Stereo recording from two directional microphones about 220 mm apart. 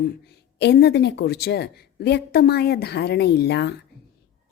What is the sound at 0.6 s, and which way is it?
A woman's voice, 50° left (ahead or behind).